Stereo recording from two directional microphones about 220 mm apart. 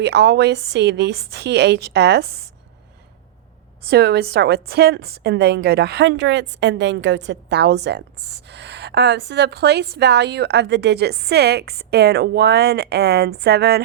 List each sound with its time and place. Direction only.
0.0 s a woman's voice: 50° right (ahead or behind)
3.8 s a woman's voice: 50° right (ahead or behind)